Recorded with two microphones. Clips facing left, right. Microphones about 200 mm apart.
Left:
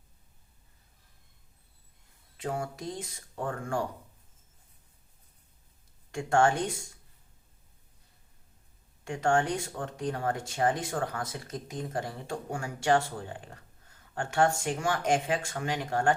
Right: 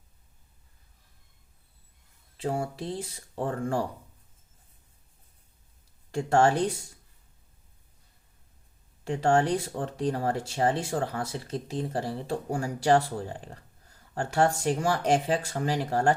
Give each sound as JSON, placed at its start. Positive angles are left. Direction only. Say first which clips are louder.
{"t": 2.4, "sound": "speech", "louder": "right 3 dB", "side_deg": -30}
{"t": 6.1, "sound": "speech", "louder": "right 2 dB", "side_deg": -35}
{"t": 9.0, "sound": "speech", "louder": "right 3 dB", "side_deg": -35}